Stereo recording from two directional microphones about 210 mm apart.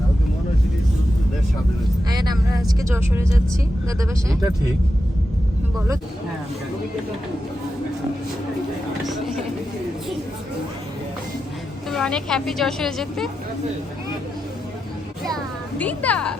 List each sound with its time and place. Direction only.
2.0 s speech: 20° right (ahead or behind)
11.9 s a woman's voice: centre (ahead or behind)
15.8 s a woman's voice: 5° left (ahead or behind)